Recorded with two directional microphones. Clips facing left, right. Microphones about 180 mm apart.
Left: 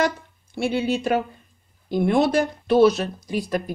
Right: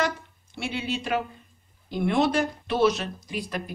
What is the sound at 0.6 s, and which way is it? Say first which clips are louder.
A woman's voice: left 8 dB; 45° left (ahead or behind).